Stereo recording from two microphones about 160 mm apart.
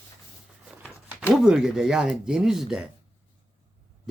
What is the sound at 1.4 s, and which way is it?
Speech, 5° right (ahead or behind).